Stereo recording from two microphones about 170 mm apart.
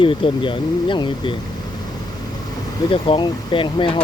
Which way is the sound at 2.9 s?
30° left (ahead or behind).